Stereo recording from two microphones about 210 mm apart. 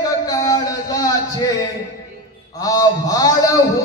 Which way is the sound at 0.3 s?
15° left (ahead or behind).